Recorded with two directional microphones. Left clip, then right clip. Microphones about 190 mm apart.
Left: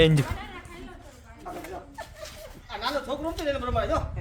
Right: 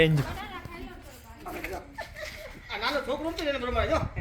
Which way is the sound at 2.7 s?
30° left (ahead or behind).